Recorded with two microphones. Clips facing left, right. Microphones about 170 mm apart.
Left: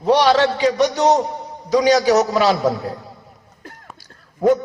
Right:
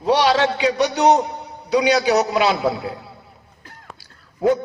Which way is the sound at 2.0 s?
40° left (ahead or behind).